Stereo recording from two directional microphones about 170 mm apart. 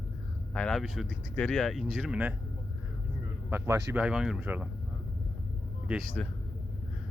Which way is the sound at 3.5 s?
15° right (ahead or behind).